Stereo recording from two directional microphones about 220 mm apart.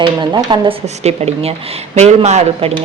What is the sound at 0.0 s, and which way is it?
Speech, 20° right (ahead or behind).